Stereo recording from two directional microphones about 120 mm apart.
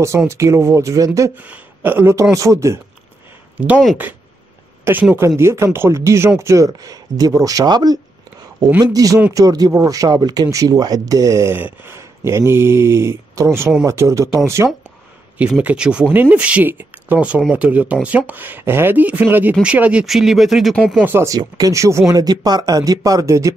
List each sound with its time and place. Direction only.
0.3 s speech: 25° right (ahead or behind)
1.4 s a woman's voice: 15° right (ahead or behind)
3.5 s speech: 10° right (ahead or behind)
4.9 s speech: 20° right (ahead or behind)
15.3 s speech: 10° right (ahead or behind)
21.0 s speech: 20° right (ahead or behind)
21.4 s speech: 30° right (ahead or behind)